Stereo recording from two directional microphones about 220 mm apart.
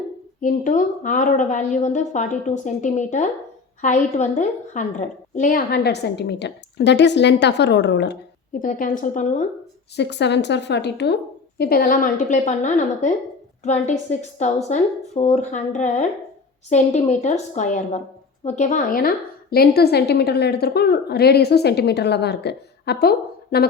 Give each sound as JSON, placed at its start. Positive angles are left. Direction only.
{"t": 0.4, "sound": "a woman's voice", "side_deg": 35}
{"t": 9.9, "sound": "a woman's voice", "side_deg": 50}